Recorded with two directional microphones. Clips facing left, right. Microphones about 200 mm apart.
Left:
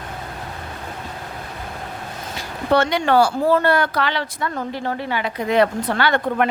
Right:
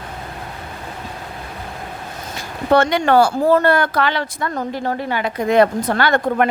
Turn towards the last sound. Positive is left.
turn(degrees=-45)  # may be behind; listen again after turning